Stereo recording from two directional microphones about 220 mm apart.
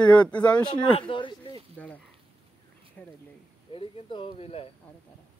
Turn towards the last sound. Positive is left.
turn(degrees=25)  # may be behind; listen again after turning